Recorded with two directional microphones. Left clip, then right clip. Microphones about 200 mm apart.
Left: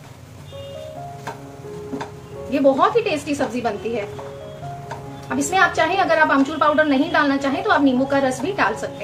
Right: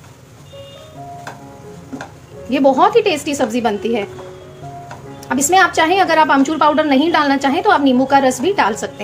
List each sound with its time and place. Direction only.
2.5 s a woman's voice: 45° right (ahead or behind)
5.3 s a woman's voice: 45° right (ahead or behind)